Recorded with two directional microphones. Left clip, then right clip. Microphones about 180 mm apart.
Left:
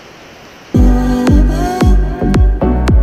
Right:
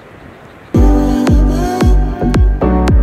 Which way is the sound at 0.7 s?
Centre (ahead or behind).